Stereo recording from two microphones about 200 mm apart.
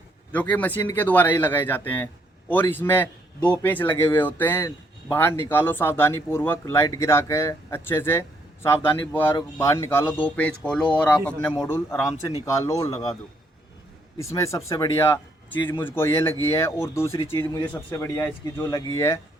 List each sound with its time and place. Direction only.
0.3 s speech: 10° left (ahead or behind)
14.2 s speech: 15° left (ahead or behind)